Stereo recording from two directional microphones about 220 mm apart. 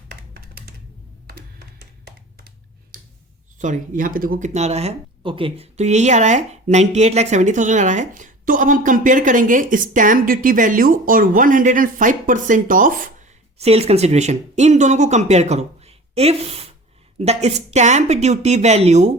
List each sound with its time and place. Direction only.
0.3 s computer keyboard: 45° right (ahead or behind)
3.6 s speech: 35° right (ahead or behind)